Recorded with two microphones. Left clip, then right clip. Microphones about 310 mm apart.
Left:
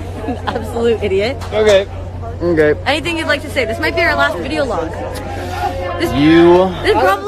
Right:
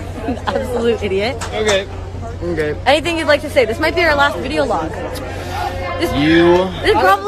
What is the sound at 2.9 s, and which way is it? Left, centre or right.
Speech, centre.